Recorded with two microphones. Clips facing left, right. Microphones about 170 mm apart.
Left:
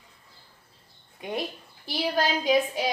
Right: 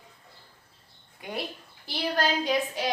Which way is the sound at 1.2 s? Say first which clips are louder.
Left 4 dB; 20° left (ahead or behind).